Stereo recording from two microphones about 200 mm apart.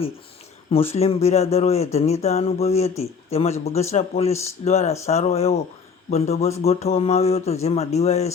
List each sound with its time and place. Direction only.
0.7 s speech: 30° left (ahead or behind)